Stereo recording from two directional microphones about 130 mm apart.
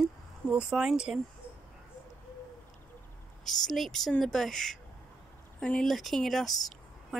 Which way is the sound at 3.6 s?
Centre (ahead or behind).